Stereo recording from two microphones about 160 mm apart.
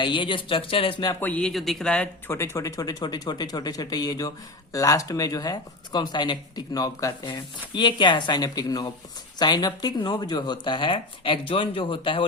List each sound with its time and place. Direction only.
0.0 s speech: 30° left (ahead or behind)
1.2 s speech: 10° left (ahead or behind); by 12.2 s 30° left (ahead or behind)